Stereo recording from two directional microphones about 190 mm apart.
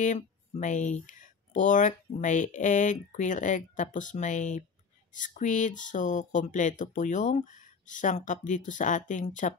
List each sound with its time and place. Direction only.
0.0 s speech: 40° left (ahead or behind)